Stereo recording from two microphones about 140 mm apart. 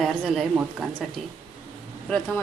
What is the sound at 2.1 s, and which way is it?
Speech, 5° left (ahead or behind).